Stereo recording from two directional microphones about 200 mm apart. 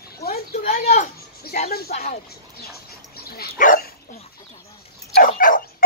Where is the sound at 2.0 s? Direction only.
50° left (ahead or behind).